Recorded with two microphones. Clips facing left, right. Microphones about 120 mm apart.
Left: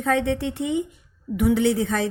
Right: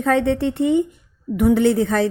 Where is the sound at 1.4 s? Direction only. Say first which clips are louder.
Right 4 dB; 50° right (ahead or behind).